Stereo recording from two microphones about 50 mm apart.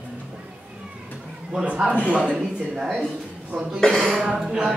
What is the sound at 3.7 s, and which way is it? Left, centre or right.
Speech, centre.